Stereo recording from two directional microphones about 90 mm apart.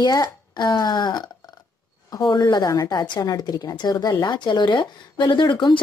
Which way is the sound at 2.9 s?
55° left (ahead or behind).